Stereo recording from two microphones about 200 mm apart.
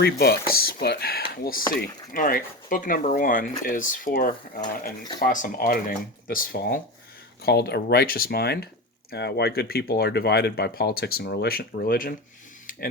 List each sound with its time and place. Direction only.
0.0 s speech: 50° left (ahead or behind)